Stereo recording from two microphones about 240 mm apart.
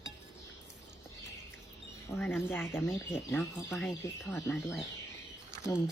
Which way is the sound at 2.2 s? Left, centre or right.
Centre.